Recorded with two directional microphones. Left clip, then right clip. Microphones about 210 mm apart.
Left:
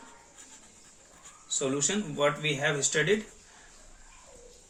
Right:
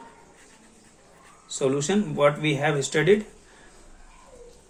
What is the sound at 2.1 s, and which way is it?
Speech, 40° right (ahead or behind).